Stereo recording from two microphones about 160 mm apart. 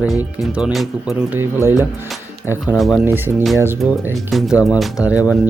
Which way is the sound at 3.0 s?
15° right (ahead or behind).